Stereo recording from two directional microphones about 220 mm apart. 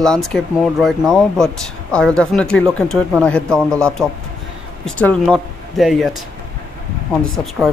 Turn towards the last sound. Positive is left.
turn(degrees=0)  # may be behind; listen again after turning